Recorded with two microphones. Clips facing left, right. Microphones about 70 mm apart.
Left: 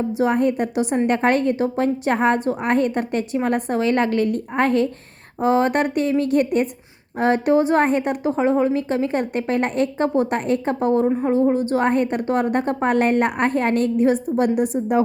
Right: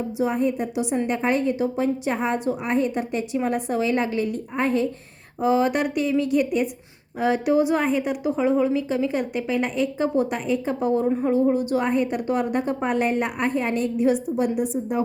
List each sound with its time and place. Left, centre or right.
0.2 s a woman's voice: left
5.4 s a woman's voice: left
11.0 s a woman's voice: left